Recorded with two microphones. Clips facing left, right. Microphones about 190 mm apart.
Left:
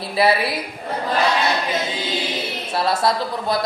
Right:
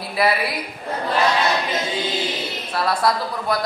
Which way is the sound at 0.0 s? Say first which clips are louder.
Left 2 dB; 30° left (ahead or behind).